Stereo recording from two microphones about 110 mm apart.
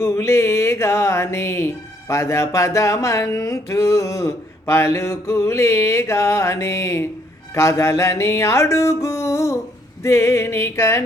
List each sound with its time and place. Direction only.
0.0 s speech: 25° left (ahead or behind)
7.5 s a sound: 25° left (ahead or behind)
10.0 s speech: 25° left (ahead or behind)